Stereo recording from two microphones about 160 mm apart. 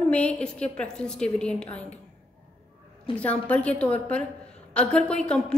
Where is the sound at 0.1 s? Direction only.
5° left (ahead or behind).